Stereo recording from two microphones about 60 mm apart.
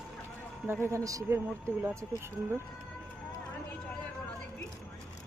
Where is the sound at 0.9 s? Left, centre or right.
Right.